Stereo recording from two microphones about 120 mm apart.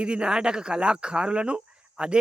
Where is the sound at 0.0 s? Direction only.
10° right (ahead or behind).